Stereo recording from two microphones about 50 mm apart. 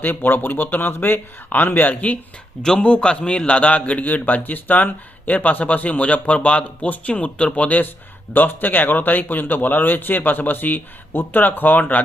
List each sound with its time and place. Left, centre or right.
0.0 s speech: left
1.9 s a man's voice: left